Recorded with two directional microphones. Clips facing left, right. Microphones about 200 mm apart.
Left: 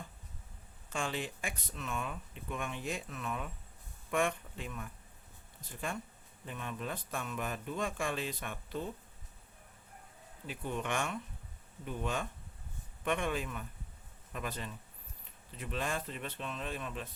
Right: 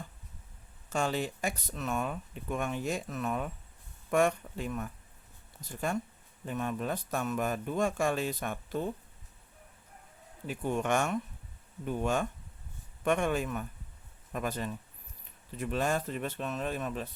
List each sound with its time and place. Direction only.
0.9 s speech: 40° right (ahead or behind)
5.9 s speech: 40° right (ahead or behind)
10.4 s speech: 45° right (ahead or behind)